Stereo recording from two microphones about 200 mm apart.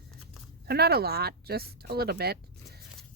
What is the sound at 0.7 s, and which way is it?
Speech, 50° right (ahead or behind).